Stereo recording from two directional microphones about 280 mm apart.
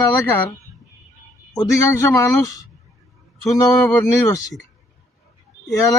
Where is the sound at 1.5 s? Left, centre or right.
Centre.